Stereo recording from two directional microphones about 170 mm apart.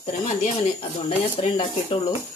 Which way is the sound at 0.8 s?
30° left (ahead or behind).